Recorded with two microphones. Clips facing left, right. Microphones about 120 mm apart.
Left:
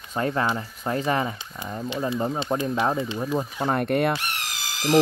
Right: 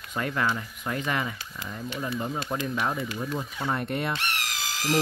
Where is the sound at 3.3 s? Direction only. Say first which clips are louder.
Left 7 dB; 45° left (ahead or behind).